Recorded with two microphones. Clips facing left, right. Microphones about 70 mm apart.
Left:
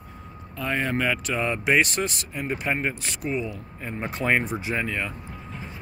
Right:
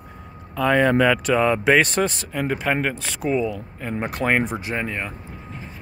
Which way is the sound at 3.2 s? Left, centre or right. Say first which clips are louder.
Right 6 dB; right.